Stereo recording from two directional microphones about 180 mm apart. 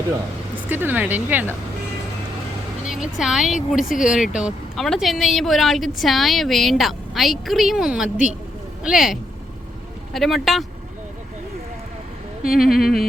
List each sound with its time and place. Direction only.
0.7 s speech: 10° right (ahead or behind)
3.2 s a woman's voice: centre (ahead or behind)
3.8 s speech: 45° left (ahead or behind)
4.1 s a woman's voice: 5° right (ahead or behind)
12.6 s a woman's voice: centre (ahead or behind)